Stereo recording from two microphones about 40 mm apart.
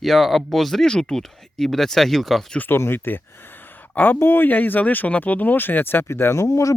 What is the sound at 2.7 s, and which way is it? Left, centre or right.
Speech, left.